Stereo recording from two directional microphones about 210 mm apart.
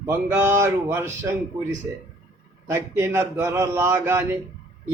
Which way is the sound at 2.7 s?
10° right (ahead or behind).